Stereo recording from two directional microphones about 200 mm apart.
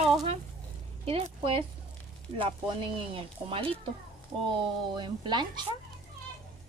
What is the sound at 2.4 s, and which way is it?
Speech, 25° right (ahead or behind).